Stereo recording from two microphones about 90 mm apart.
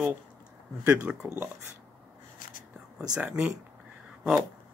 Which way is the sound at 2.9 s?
10° right (ahead or behind).